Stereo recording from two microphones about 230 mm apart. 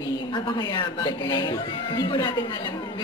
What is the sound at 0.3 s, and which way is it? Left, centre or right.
A woman's voice, centre.